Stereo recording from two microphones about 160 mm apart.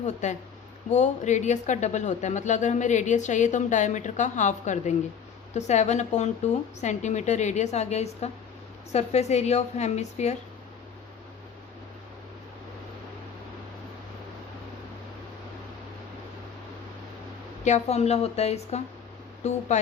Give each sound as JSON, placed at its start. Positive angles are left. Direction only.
{"t": 0.0, "sound": "speech", "side_deg": 45}
{"t": 17.6, "sound": "a woman's voice", "side_deg": 45}